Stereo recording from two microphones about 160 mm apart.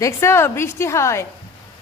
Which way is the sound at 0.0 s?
15° left (ahead or behind).